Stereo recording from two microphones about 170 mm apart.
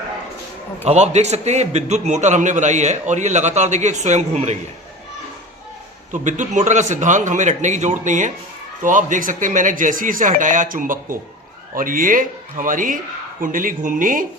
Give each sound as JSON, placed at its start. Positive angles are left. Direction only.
{"t": 0.9, "sound": "a man's voice", "side_deg": -40}
{"t": 6.2, "sound": "a man's voice", "side_deg": -45}